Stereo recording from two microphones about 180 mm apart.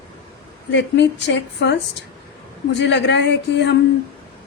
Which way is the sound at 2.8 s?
75° left (ahead or behind).